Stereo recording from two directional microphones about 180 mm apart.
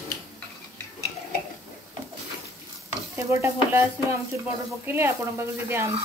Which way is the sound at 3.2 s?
15° right (ahead or behind).